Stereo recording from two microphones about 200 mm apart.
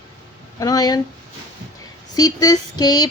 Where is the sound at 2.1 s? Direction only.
20° left (ahead or behind).